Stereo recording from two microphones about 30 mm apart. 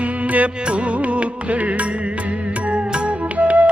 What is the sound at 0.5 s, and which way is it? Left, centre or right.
Music, right.